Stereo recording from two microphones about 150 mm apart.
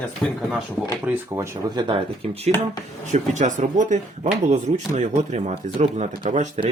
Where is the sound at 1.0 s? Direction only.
15° right (ahead or behind); by 2.5 s 40° right (ahead or behind).